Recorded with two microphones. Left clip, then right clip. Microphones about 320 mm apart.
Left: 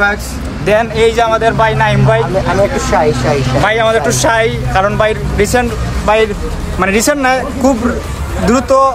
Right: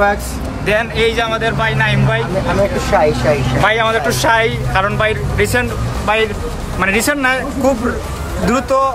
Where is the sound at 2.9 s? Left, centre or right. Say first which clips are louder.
Even; centre.